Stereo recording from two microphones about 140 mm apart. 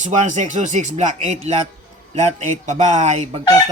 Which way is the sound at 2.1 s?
55° right (ahead or behind).